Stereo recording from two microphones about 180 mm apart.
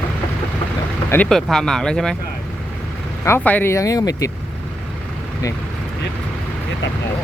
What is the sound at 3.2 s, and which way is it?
Speech, 10° left (ahead or behind).